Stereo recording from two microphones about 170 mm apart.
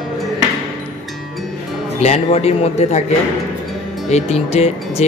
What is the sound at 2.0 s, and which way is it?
Speech, 35° left (ahead or behind).